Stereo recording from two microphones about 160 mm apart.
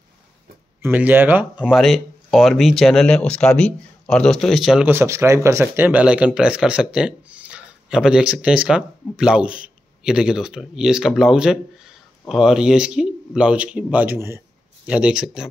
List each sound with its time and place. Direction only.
0.8 s speech: 10° right (ahead or behind)